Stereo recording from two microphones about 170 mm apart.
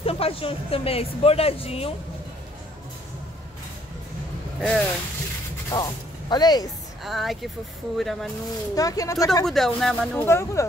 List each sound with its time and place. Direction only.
0.0 s speech: 35° left (ahead or behind)
4.6 s speech: 5° left (ahead or behind)
5.7 s speech: 25° left (ahead or behind)
7.0 s speech: centre (ahead or behind)
8.7 s speech: 20° left (ahead or behind)
9.5 s speech: centre (ahead or behind)
10.2 s speech: 15° left (ahead or behind)